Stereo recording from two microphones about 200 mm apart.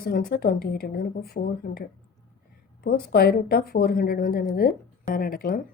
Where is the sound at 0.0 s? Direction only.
50° left (ahead or behind).